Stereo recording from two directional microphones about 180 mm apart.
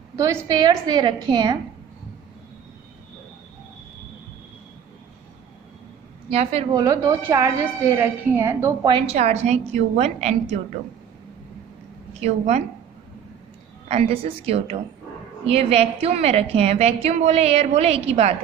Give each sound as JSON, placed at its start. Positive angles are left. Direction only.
{"t": 0.2, "sound": "a woman's voice", "side_deg": -15}
{"t": 6.3, "sound": "a woman's voice", "side_deg": -35}
{"t": 6.7, "sound": "a woman's voice", "side_deg": -20}
{"t": 8.9, "sound": "a woman's voice", "side_deg": -35}
{"t": 12.2, "sound": "a woman's voice", "side_deg": -35}
{"t": 13.8, "sound": "a woman's voice", "side_deg": -35}